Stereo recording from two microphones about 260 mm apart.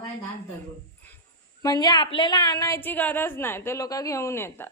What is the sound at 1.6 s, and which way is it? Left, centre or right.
A woman's voice, centre.